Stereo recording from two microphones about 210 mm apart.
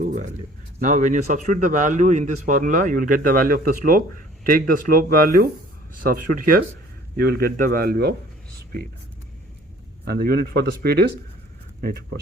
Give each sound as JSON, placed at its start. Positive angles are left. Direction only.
{"t": 0.0, "sound": "a sound", "side_deg": -35}
{"t": 0.8, "sound": "a man's voice", "side_deg": -35}
{"t": 10.1, "sound": "speech", "side_deg": -45}